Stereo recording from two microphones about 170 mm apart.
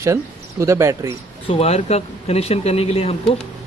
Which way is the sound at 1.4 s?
35° left (ahead or behind).